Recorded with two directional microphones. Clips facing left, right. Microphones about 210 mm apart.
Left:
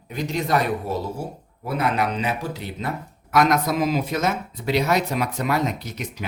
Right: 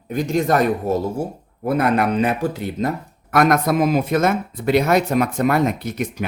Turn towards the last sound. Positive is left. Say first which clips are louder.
# right 7 dB
turn(degrees=-55)  # may be behind; listen again after turning